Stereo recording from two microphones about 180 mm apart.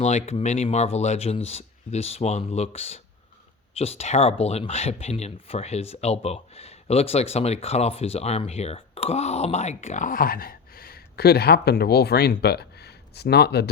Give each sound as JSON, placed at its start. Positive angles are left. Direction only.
{"t": 0.0, "sound": "speech", "side_deg": 40}